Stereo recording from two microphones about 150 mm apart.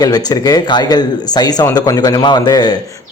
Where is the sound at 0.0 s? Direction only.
25° left (ahead or behind).